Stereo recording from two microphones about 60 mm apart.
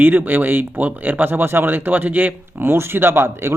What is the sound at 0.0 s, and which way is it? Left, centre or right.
Speech, right.